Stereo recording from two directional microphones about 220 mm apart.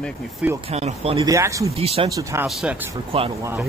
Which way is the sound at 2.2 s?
15° right (ahead or behind).